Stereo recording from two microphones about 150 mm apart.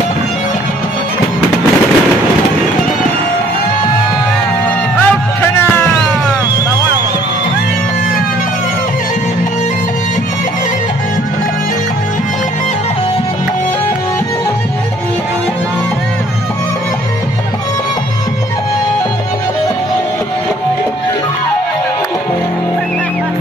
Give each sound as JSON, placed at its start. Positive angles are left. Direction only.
{"t": 4.9, "sound": "music", "side_deg": 15}